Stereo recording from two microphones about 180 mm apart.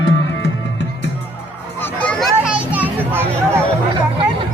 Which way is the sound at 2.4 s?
10° right (ahead or behind).